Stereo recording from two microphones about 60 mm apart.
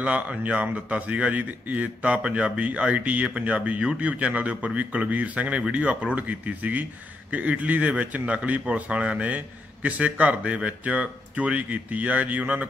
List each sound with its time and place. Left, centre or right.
0.0 s speech: right